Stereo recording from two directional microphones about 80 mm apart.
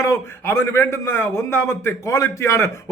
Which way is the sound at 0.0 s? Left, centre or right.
Left.